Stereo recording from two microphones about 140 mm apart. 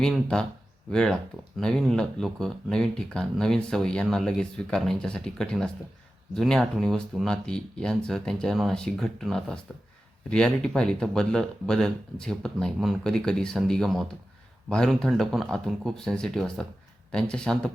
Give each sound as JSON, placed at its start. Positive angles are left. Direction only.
{"t": 0.0, "sound": "speech", "side_deg": 5}